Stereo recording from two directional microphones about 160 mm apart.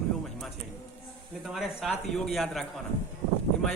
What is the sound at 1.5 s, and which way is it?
A man's voice, centre (ahead or behind).